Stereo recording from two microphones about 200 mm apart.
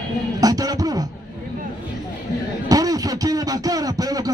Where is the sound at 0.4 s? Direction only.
20° right (ahead or behind).